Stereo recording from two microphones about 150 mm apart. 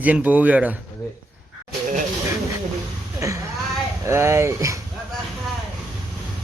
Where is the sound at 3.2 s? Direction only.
20° right (ahead or behind).